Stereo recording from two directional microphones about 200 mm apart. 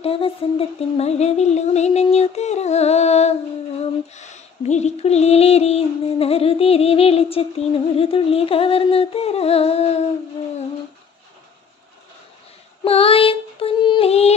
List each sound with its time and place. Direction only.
0.0 s a sound: 30° left (ahead or behind)
7.9 s humming: 30° left (ahead or behind)
12.8 s female singing: 30° left (ahead or behind)